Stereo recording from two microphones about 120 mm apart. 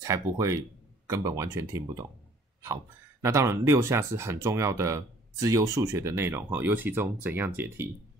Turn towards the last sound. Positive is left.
turn(degrees=-20)  # may be behind; listen again after turning